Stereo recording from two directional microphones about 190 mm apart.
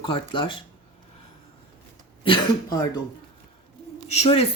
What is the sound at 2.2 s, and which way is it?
Speech, 25° left (ahead or behind).